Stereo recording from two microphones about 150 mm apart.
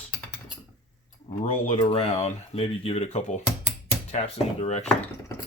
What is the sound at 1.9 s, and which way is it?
Speech, 40° left (ahead or behind).